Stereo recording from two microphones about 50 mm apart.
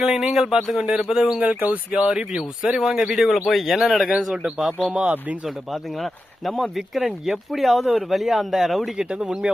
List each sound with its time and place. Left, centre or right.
0.0 s speech: centre
1.5 s speech: right
2.0 s speech: centre
4.4 s speech: centre
5.7 s speech: centre
9.0 s speech: right